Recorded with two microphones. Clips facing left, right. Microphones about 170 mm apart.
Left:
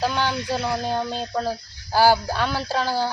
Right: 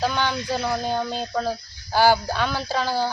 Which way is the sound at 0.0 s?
Centre (ahead or behind).